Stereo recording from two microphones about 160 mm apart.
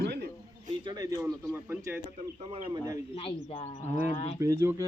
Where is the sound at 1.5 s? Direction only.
15° right (ahead or behind).